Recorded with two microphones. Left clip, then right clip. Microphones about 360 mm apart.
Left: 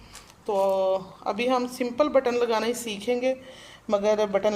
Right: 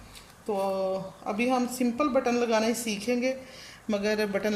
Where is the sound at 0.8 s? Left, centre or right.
Left.